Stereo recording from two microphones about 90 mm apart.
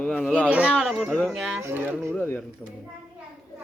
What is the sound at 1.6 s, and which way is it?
Speech, 25° right (ahead or behind).